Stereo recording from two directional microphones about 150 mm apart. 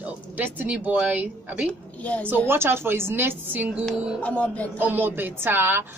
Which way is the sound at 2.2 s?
15° right (ahead or behind).